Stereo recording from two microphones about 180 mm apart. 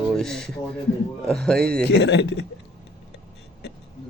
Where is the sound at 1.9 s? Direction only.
70° left (ahead or behind).